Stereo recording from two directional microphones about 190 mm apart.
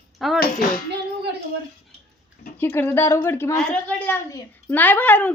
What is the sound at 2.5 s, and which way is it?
Speech, 10° left (ahead or behind).